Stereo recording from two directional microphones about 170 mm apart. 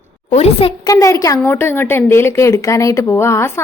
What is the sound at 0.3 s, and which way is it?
Speech, 40° left (ahead or behind).